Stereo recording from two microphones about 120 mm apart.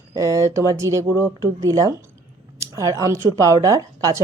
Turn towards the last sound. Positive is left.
turn(degrees=-30)  # may be behind; listen again after turning